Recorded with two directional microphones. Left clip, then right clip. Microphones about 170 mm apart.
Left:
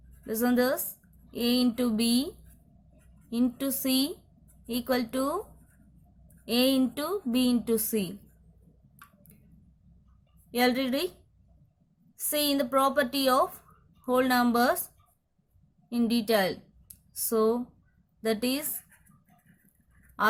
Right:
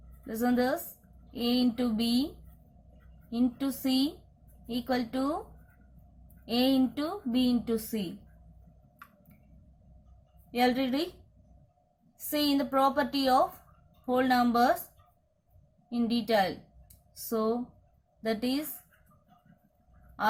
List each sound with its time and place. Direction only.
0.3 s speech: 30° left (ahead or behind)
3.2 s speech: 30° left (ahead or behind)
6.4 s speech: 35° left (ahead or behind)
10.5 s speech: 35° left (ahead or behind)
12.3 s speech: 30° left (ahead or behind)
15.9 s a woman's voice: 30° left (ahead or behind)